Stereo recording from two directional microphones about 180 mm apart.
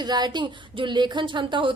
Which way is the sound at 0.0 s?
25° right (ahead or behind).